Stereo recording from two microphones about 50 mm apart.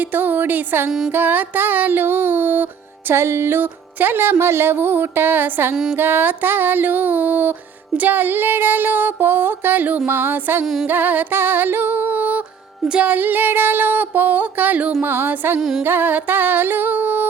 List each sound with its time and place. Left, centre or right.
0.1 s music: right
0.9 s music: centre
1.1 s speech: right
3.1 s speech: right
6.0 s music: right
7.9 s speech: right
10.8 s music: right
15.0 s speech: right
15.8 s music: right